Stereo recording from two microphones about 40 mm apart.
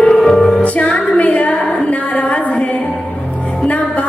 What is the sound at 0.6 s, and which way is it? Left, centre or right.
Music, left.